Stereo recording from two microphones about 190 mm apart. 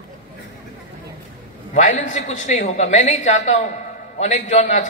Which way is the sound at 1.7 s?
40° left (ahead or behind).